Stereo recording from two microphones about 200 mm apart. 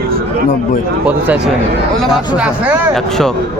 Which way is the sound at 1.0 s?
5° right (ahead or behind).